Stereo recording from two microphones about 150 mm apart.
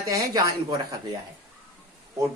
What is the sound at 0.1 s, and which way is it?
Speech, 20° right (ahead or behind).